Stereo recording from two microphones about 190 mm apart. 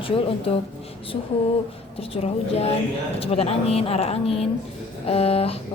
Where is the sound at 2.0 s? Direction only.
30° left (ahead or behind).